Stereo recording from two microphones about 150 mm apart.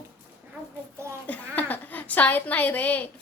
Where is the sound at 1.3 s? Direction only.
10° left (ahead or behind).